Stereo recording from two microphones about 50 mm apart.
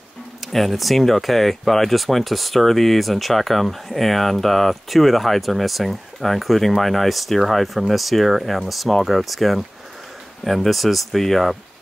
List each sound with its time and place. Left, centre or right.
0.5 s speech: centre